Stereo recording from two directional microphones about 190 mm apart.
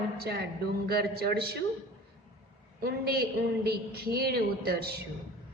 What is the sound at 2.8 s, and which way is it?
A woman's voice, 55° right (ahead or behind).